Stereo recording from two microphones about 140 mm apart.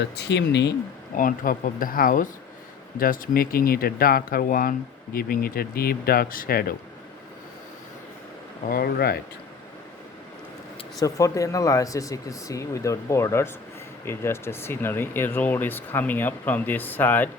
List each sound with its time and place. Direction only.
1.1 s speech: 75° left (ahead or behind)
3.0 s speech: 90° left
8.6 s speech: 90° left
11.0 s speech: 25° left (ahead or behind)